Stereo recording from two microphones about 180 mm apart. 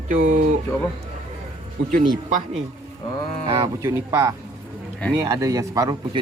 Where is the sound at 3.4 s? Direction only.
25° right (ahead or behind).